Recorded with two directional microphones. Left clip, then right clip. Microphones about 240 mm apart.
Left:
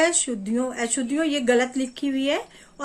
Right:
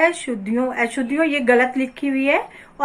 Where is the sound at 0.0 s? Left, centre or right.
Left.